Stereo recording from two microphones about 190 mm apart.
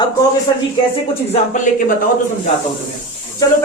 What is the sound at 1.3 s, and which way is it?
Speech, 40° left (ahead or behind).